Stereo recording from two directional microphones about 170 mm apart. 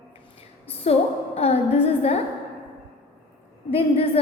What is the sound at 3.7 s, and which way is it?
Speech, 35° left (ahead or behind).